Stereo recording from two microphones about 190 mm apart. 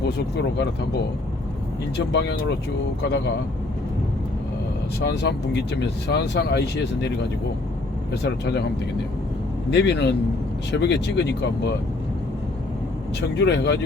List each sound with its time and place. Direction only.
0.0 s speech: 60° left (ahead or behind)
2.1 s speech: 65° left (ahead or behind)
5.0 s speech: 65° left (ahead or behind)
8.1 s speech: 60° left (ahead or behind)
9.6 s speech: 65° left (ahead or behind)
13.3 s speech: 65° left (ahead or behind)